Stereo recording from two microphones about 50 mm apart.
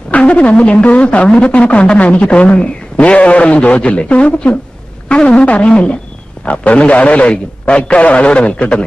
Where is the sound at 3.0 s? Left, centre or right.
Left.